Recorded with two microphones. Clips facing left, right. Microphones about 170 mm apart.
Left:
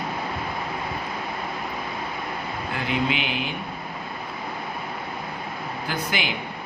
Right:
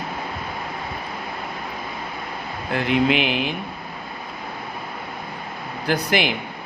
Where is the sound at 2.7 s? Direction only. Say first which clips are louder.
Right 7 dB; 65° right (ahead or behind).